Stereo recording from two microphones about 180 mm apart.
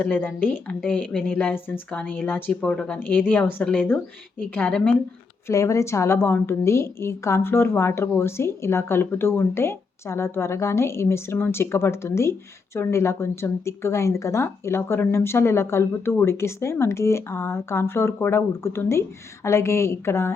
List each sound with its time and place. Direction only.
0.0 s a woman's voice: 10° left (ahead or behind)